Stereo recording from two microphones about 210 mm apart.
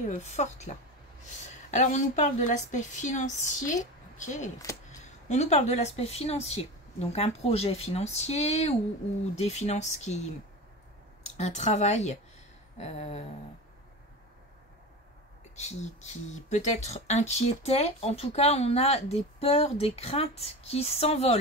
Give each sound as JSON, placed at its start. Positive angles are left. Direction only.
{"t": 0.0, "sound": "a woman's voice", "side_deg": 35}
{"t": 15.5, "sound": "speech", "side_deg": 35}